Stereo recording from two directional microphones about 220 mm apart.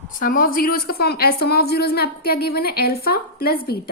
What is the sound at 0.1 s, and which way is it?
A woman's voice, 40° left (ahead or behind).